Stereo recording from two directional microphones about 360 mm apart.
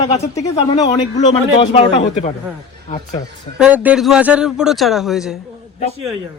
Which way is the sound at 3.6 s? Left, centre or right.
Centre.